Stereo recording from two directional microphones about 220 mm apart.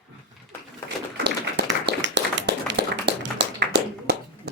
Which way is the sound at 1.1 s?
50° right (ahead or behind).